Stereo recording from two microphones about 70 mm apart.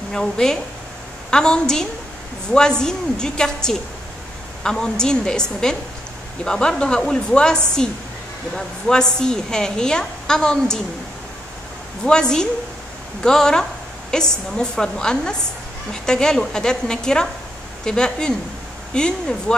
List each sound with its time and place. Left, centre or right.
0.1 s a woman's voice: centre
12.0 s a woman's voice: centre